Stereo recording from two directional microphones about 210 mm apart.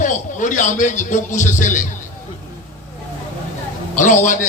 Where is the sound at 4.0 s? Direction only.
35° left (ahead or behind).